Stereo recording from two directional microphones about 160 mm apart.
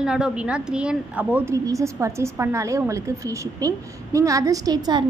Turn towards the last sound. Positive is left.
turn(degrees=-25)  # may be behind; listen again after turning